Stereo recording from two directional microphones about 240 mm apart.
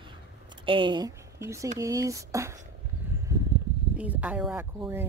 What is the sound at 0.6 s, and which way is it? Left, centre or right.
A woman's voice, right.